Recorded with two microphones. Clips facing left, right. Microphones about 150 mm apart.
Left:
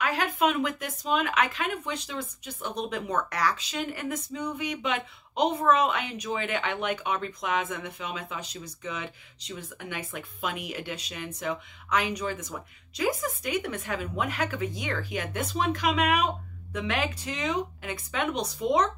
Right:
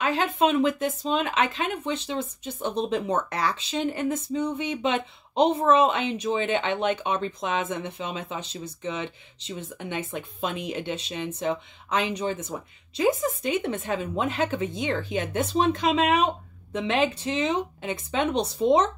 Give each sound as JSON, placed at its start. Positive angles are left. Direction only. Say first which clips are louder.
{"t": 0.0, "sound": "speech", "louder": "right 3 dB", "side_deg": -25}